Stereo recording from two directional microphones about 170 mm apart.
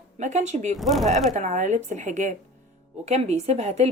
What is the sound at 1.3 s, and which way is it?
Speech, 45° right (ahead or behind).